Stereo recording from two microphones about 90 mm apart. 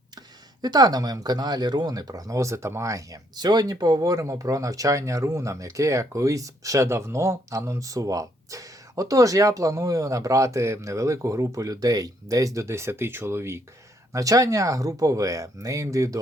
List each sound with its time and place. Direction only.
0.6 s speech: 50° right (ahead or behind)